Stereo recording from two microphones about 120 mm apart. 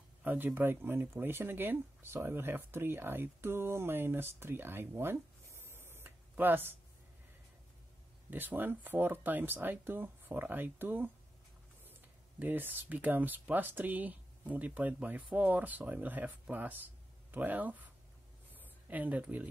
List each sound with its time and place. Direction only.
0.2 s speech: 15° right (ahead or behind)
8.3 s speech: 15° right (ahead or behind)
12.4 s speech: 15° right (ahead or behind)
18.5 s a sound: 15° right (ahead or behind)